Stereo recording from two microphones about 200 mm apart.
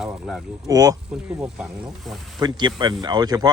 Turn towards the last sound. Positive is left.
turn(degrees=-20)  # may be behind; listen again after turning